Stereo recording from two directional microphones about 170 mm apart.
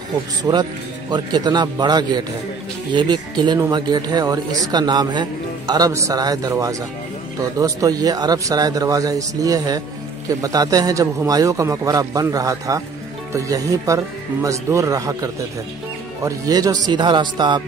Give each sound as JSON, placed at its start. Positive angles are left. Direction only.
{"t": 0.4, "sound": "speech", "side_deg": -25}
{"t": 16.3, "sound": "speech", "side_deg": -20}